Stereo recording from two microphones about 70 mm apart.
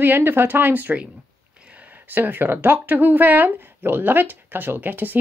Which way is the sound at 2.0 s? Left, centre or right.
Right.